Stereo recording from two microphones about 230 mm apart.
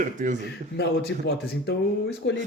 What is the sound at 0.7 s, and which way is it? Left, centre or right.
Speech, left.